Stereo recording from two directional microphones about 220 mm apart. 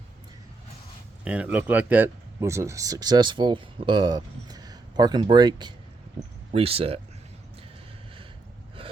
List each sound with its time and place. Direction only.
1.2 s speech: 5° right (ahead or behind); by 7.0 s 25° right (ahead or behind)
8.8 s gasp: 25° right (ahead or behind)